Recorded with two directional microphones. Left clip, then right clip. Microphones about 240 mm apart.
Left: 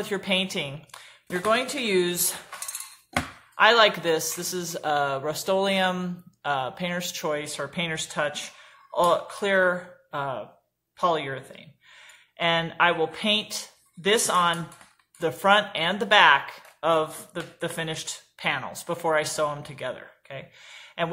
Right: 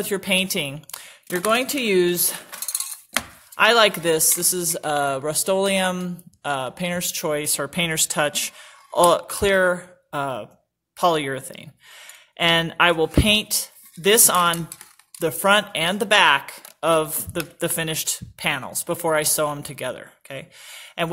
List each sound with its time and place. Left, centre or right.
0.0 s speech: right
3.5 s speech: right